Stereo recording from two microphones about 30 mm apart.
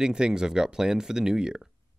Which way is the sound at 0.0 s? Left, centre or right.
Right.